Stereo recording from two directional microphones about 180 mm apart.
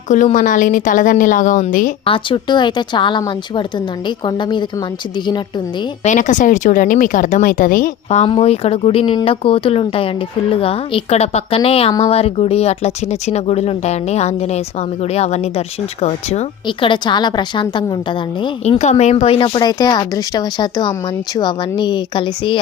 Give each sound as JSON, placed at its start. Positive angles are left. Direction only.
{"t": 0.1, "sound": "speech", "side_deg": 45}
{"t": 2.0, "sound": "speech", "side_deg": 30}
{"t": 6.1, "sound": "speech", "side_deg": 45}